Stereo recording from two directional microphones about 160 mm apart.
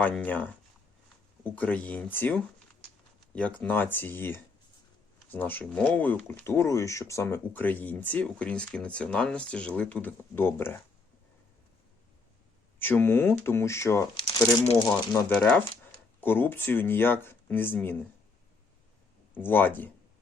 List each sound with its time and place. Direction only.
0.0 s speech: 10° left (ahead or behind)
3.6 s speech: 10° left (ahead or behind)
12.8 s speech: 10° left (ahead or behind)
14.2 s speech: 30° left (ahead or behind)
15.1 s speech: 5° left (ahead or behind)
19.3 s speech: 10° left (ahead or behind)